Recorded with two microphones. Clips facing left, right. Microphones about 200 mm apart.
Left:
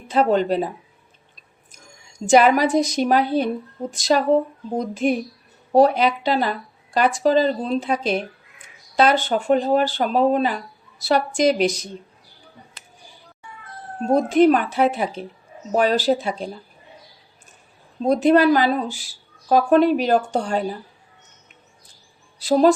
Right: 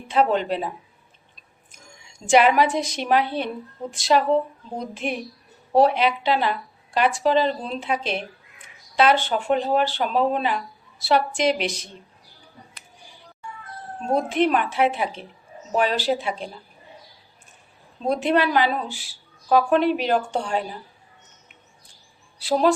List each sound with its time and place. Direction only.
0.1 s a woman's voice: 40° left (ahead or behind)
2.1 s a woman's voice: 40° left (ahead or behind)
14.1 s a woman's voice: 40° left (ahead or behind)
18.0 s a woman's voice: 40° left (ahead or behind)
22.4 s speech: 40° left (ahead or behind)